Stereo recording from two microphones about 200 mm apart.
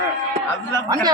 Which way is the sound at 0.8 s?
15° right (ahead or behind).